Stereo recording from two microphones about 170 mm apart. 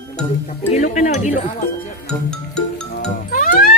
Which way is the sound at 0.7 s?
45° left (ahead or behind).